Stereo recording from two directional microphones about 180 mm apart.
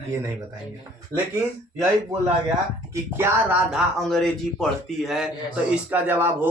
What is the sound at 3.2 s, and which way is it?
Speech, 10° right (ahead or behind).